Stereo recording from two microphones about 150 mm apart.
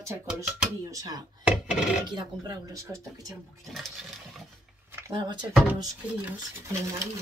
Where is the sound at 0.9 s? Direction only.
25° right (ahead or behind).